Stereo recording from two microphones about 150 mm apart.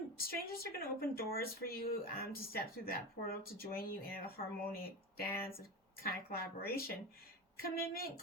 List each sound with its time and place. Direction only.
0.2 s a woman's voice: 90° left